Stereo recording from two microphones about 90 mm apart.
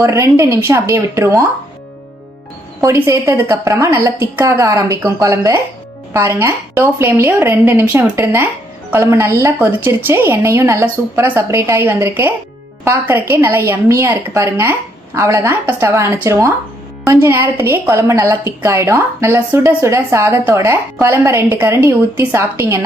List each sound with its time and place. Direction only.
0.0 s a woman's voice: 35° right (ahead or behind)
2.8 s a woman's voice: 35° right (ahead or behind)